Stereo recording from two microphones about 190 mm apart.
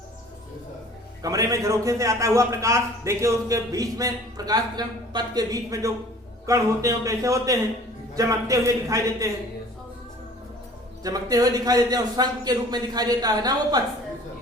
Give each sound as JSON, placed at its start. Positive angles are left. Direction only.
{"t": 1.2, "sound": "a man's voice", "side_deg": -20}
{"t": 11.0, "sound": "a man's voice", "side_deg": -20}